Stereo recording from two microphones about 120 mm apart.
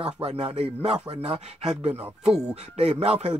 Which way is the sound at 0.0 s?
55° right (ahead or behind).